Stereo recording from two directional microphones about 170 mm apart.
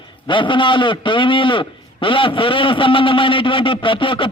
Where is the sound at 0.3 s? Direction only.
30° left (ahead or behind).